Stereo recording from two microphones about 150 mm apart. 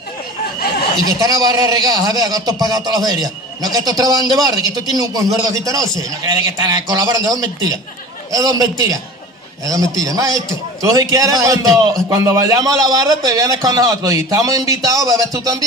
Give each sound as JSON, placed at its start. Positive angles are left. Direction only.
{"t": 1.0, "sound": "a man's voice", "side_deg": -25}